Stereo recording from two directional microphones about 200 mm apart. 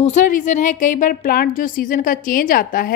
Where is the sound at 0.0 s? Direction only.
40° left (ahead or behind).